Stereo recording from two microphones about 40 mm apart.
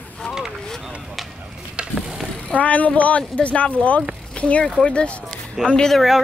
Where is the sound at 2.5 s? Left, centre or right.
Left.